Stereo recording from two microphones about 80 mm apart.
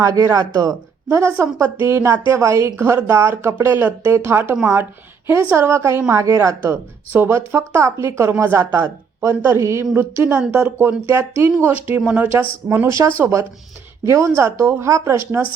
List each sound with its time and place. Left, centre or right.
0.0 s speech: right
1.4 s speech: right
6.6 s speech: right
12.9 s speech: right